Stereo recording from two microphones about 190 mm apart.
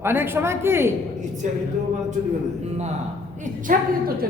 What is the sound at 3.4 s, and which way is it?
Speech, 45° right (ahead or behind).